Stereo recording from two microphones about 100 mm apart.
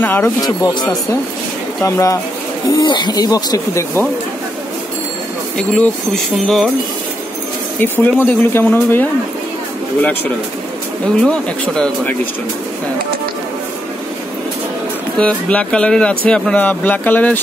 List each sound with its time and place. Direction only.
0.0 s speech: 20° left (ahead or behind)
0.4 s speech: 40° left (ahead or behind)
2.8 s speech: 50° left (ahead or behind); by 4.0 s 30° left (ahead or behind)
5.6 s speech: 5° left (ahead or behind)
7.8 s speech: 20° left (ahead or behind)
11.2 s speech: 10° left (ahead or behind)
15.1 s speech: 10° left (ahead or behind)